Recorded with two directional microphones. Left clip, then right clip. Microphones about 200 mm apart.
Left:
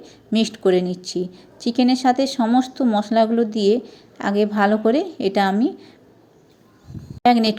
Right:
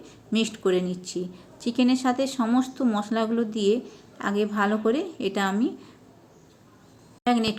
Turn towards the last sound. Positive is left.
turn(degrees=30)  # may be behind; listen again after turning